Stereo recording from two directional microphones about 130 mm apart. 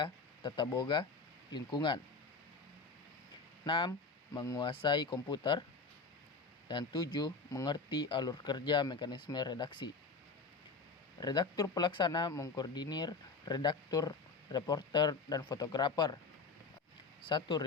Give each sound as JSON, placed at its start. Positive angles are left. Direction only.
{"t": 0.0, "sound": "speech", "side_deg": 35}
{"t": 3.6, "sound": "speech", "side_deg": 35}
{"t": 6.7, "sound": "speech", "side_deg": 35}
{"t": 11.2, "sound": "speech", "side_deg": 30}
{"t": 17.2, "sound": "speech", "side_deg": 35}